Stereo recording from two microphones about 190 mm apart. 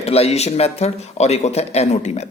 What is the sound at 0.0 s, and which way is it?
Speech, 30° left (ahead or behind).